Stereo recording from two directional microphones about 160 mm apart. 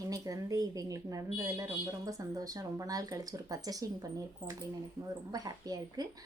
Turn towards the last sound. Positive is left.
turn(degrees=-25)  # may be behind; listen again after turning